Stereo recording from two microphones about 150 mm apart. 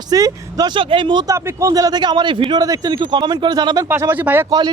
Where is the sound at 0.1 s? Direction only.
25° right (ahead or behind).